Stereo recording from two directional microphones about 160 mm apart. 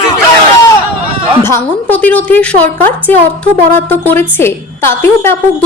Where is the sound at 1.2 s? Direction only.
30° right (ahead or behind).